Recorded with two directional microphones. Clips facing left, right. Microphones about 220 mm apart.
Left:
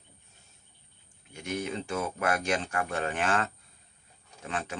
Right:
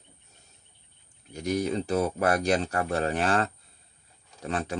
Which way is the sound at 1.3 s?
40° right (ahead or behind).